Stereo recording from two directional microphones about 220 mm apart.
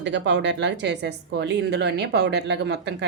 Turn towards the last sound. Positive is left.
turn(degrees=-50)  # may be behind; listen again after turning